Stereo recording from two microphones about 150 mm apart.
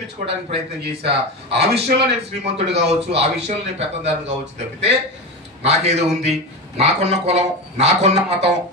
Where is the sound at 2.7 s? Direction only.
45° right (ahead or behind).